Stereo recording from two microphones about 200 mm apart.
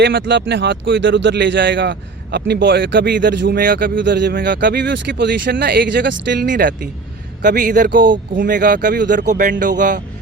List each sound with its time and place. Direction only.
0.0 s speech: 65° right (ahead or behind)
3.6 s a man's voice: 45° right (ahead or behind)
3.9 s speech: 60° right (ahead or behind)
6.5 s a man's voice: 45° right (ahead or behind)